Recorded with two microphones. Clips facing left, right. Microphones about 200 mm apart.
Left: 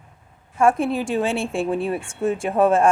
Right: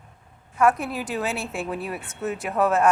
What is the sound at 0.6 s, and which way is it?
A woman's voice, 30° left (ahead or behind).